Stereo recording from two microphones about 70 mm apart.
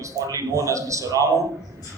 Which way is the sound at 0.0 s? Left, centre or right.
Right.